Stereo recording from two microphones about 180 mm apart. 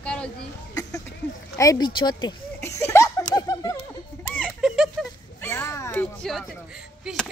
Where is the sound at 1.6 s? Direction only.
20° left (ahead or behind).